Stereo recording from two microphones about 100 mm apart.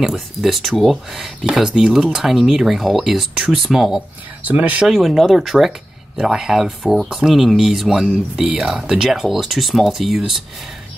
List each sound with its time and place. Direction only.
0.0 s speech: centre (ahead or behind)
4.4 s speech: 15° right (ahead or behind)
4.8 s speech: centre (ahead or behind)